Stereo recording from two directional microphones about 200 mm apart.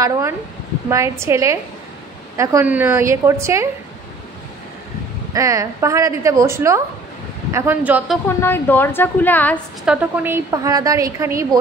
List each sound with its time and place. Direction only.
0.8 s a woman's voice: 15° right (ahead or behind)
5.3 s a woman's voice: 15° right (ahead or behind)
8.4 s a woman's voice: 10° left (ahead or behind)
9.8 s a woman's voice: 5° right (ahead or behind)